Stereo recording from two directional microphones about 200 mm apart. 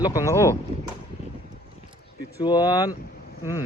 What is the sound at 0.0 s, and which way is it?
Speech, 15° left (ahead or behind).